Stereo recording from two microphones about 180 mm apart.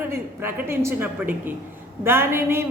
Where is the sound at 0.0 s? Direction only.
10° right (ahead or behind).